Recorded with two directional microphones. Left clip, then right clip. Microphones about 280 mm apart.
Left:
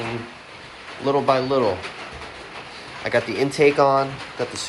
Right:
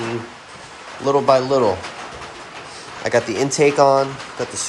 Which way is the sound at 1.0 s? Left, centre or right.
Centre.